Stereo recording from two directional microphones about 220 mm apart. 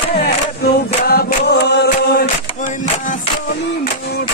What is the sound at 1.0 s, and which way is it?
Mantra, 45° left (ahead or behind).